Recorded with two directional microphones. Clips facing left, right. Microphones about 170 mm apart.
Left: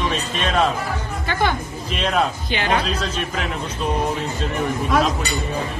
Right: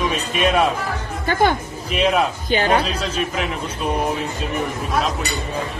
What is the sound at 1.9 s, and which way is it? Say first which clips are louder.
Speech: right 4 dB; 5° right (ahead or behind).